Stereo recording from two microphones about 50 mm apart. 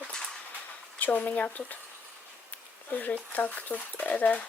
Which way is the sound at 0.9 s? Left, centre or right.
Left.